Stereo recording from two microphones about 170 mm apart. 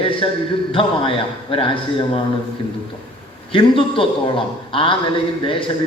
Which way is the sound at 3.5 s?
30° left (ahead or behind).